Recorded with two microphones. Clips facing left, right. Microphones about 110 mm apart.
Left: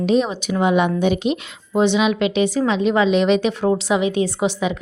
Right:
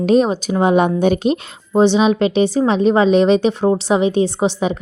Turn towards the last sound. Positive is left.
turn(degrees=-35)  # may be behind; listen again after turning